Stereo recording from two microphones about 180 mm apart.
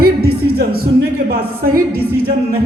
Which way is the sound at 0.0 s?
60° right (ahead or behind).